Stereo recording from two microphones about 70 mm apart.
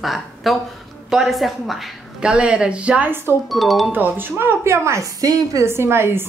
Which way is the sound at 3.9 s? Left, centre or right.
Right.